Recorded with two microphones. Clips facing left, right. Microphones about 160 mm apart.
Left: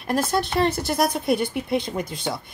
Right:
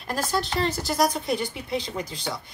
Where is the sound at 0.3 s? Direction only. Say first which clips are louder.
Left 2 dB; 60° left (ahead or behind).